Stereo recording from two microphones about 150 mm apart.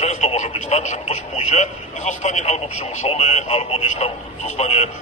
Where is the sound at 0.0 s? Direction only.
50° left (ahead or behind).